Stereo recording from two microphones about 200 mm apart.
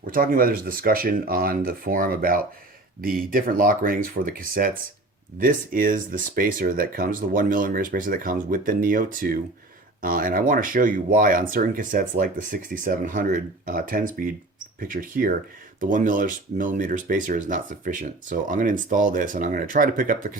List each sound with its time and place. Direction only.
0.1 s speech: 45° right (ahead or behind)